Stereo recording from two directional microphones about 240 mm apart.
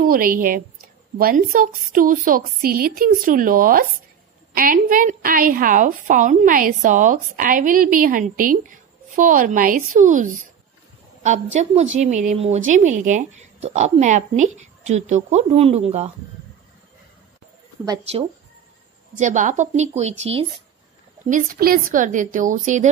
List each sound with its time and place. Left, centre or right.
0.0 s a woman's voice: right
17.8 s a woman's voice: right
21.3 s a woman's voice: right